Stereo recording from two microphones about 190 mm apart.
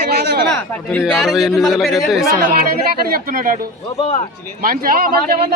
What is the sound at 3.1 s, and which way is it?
Speech, 50° right (ahead or behind).